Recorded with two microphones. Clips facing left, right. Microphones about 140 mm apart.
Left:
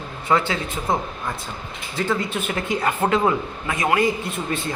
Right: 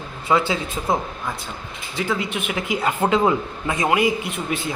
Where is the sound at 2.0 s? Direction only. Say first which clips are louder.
Left 1 dB; centre (ahead or behind).